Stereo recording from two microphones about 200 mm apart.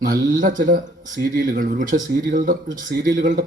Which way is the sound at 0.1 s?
40° right (ahead or behind).